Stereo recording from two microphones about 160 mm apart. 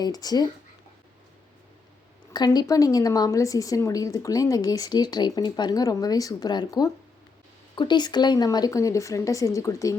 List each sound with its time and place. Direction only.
0.0 s a woman's voice: 25° left (ahead or behind)
2.3 s a woman's voice: 25° left (ahead or behind)